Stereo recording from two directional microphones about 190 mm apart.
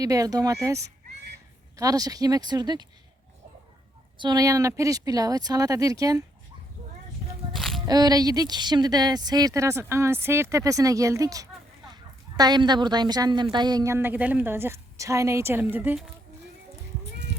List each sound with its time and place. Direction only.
0.0 s speech: 20° right (ahead or behind)
4.2 s speech: 20° right (ahead or behind)
7.5 s a sound: centre (ahead or behind)
7.9 s speech: 20° right (ahead or behind)